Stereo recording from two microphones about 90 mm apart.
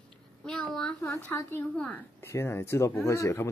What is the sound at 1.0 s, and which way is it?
Speech, 30° left (ahead or behind).